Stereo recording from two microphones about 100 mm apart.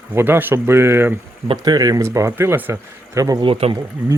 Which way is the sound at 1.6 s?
40° right (ahead or behind).